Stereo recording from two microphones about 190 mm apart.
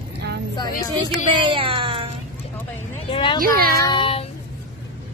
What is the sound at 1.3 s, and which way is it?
Speech, 25° right (ahead or behind).